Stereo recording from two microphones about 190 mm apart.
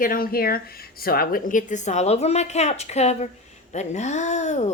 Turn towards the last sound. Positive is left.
turn(degrees=35)  # may be behind; listen again after turning